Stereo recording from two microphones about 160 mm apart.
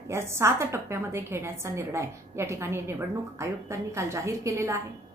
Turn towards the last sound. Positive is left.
turn(degrees=-20)  # may be behind; listen again after turning